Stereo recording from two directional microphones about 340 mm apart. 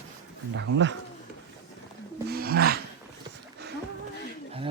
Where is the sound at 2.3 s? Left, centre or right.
Right.